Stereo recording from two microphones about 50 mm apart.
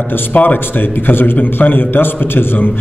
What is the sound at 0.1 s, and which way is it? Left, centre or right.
A man's voice, left.